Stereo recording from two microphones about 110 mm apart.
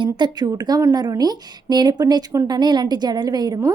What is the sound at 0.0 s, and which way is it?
A woman's voice, 40° right (ahead or behind).